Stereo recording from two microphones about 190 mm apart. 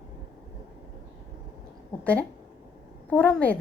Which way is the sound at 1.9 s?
5° left (ahead or behind).